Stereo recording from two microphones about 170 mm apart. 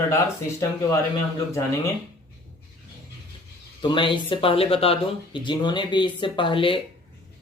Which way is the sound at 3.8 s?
30° left (ahead or behind).